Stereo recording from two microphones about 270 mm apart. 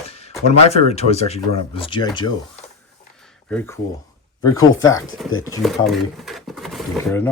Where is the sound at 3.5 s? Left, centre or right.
Centre.